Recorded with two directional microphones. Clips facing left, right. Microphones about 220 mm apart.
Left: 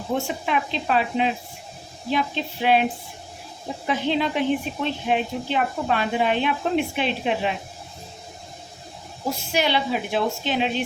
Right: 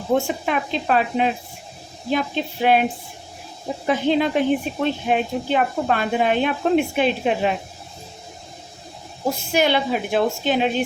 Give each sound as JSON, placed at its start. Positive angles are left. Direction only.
{"t": 0.1, "sound": "a woman's voice", "side_deg": -45}
{"t": 3.8, "sound": "a woman's voice", "side_deg": -50}
{"t": 9.5, "sound": "a woman's voice", "side_deg": -50}